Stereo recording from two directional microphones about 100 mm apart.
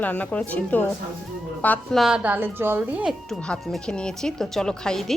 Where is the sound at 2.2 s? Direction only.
15° right (ahead or behind).